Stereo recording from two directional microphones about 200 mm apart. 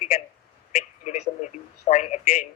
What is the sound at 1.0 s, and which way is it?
A man's voice, 35° left (ahead or behind).